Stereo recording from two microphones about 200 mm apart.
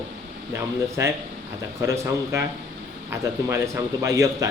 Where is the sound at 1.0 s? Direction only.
15° right (ahead or behind).